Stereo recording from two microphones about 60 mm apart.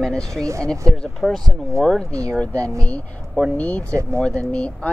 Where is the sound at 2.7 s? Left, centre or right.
Left.